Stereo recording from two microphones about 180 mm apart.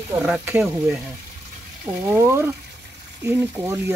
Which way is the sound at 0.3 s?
5° right (ahead or behind).